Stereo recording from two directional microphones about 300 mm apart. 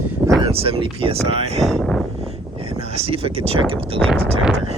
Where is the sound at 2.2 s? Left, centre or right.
Centre.